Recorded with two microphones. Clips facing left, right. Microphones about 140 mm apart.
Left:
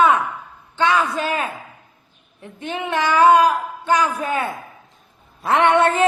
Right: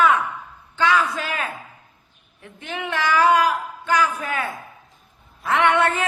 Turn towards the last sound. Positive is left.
turn(degrees=30)  # may be behind; listen again after turning